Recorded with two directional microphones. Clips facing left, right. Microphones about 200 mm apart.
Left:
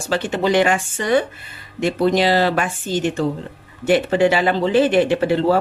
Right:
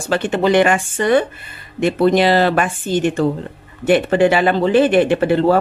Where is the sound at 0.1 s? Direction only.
55° right (ahead or behind).